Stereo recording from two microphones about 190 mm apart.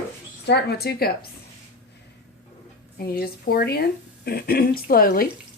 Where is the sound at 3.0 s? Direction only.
55° left (ahead or behind).